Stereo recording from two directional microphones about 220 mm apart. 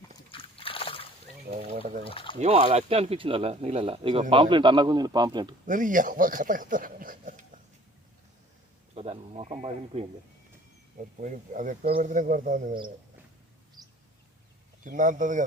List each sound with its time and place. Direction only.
0.3 s splash: 25° left (ahead or behind)
1.7 s a sound: 40° right (ahead or behind)
2.0 s a sound: 25° left (ahead or behind)
2.4 s speech: 30° right (ahead or behind)
5.6 s speech: 35° right (ahead or behind)
9.0 s speech: 30° right (ahead or behind)
14.8 s speech: 35° right (ahead or behind)